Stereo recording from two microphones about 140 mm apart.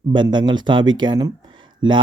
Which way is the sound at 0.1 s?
35° right (ahead or behind).